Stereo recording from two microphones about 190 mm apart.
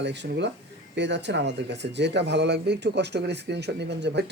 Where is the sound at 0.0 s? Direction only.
65° right (ahead or behind).